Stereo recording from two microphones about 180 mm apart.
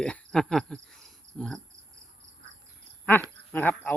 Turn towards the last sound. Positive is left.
turn(degrees=10)  # may be behind; listen again after turning